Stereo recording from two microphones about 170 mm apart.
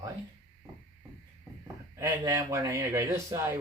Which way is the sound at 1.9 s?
20° right (ahead or behind).